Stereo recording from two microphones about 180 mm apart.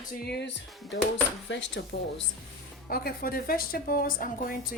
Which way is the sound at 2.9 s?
55° left (ahead or behind).